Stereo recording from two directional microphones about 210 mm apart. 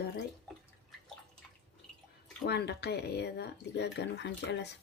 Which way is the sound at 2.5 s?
50° left (ahead or behind).